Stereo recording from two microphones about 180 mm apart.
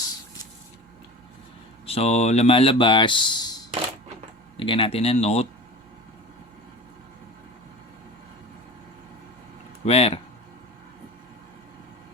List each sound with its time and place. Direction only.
1.9 s speech: 35° left (ahead or behind)
9.8 s speech: 35° left (ahead or behind)